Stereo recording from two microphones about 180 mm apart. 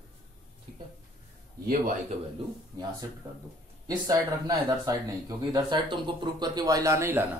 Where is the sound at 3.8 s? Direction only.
20° right (ahead or behind).